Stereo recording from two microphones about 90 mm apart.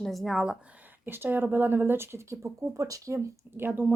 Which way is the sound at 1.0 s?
25° right (ahead or behind).